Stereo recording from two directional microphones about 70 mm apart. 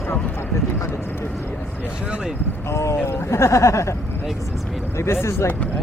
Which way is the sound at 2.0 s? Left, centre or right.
Centre.